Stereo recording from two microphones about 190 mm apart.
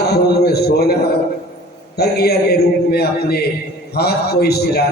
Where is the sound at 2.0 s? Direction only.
55° left (ahead or behind).